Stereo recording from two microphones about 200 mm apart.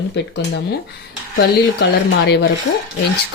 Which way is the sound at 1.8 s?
60° left (ahead or behind).